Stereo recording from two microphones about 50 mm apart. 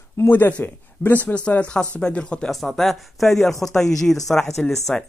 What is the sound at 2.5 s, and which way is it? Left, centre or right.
Speech, centre.